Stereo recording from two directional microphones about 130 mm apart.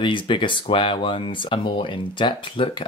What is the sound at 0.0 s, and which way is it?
Speech, 40° left (ahead or behind).